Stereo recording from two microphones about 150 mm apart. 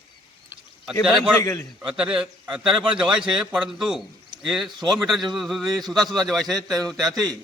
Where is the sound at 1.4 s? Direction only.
20° left (ahead or behind).